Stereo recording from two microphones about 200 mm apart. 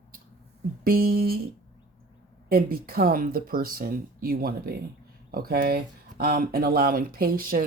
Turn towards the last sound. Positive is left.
turn(degrees=-45)  # may be behind; listen again after turning